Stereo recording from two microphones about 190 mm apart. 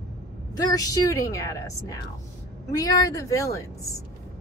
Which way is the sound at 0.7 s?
20° left (ahead or behind).